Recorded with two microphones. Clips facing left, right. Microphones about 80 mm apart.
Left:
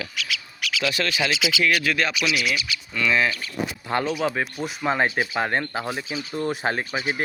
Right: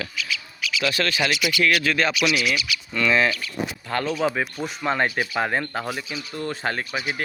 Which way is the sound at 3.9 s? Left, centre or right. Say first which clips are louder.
Left 2 dB; centre.